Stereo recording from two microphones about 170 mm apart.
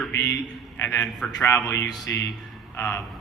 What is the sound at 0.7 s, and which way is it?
Speech, 10° left (ahead or behind).